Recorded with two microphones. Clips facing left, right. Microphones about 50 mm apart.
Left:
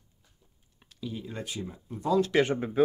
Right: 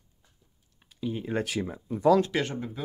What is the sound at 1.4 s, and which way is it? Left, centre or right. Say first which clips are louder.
Speech: right 6 dB; right.